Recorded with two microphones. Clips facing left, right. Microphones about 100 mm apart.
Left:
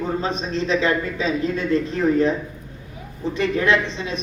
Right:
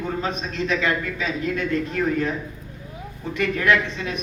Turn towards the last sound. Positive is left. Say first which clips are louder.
# left 1 dB
turn(degrees=25)  # may be behind; listen again after turning